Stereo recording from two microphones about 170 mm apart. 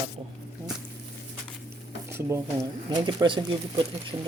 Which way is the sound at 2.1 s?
15° right (ahead or behind).